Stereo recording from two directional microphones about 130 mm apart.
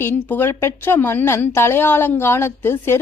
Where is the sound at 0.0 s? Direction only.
15° left (ahead or behind).